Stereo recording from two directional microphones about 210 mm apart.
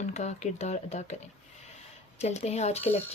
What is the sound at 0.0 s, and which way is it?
Speech, 35° left (ahead or behind).